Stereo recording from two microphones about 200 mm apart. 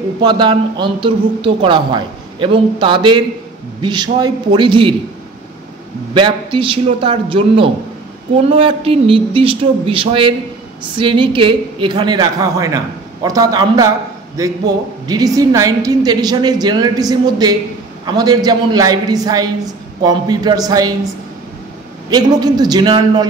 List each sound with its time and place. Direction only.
0.2 s a woman's voice: 25° right (ahead or behind)
6.1 s a woman's voice: 25° right (ahead or behind)
22.1 s a woman's voice: 20° right (ahead or behind)